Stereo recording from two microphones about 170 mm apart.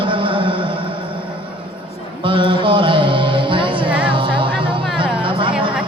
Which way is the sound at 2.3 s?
30° right (ahead or behind).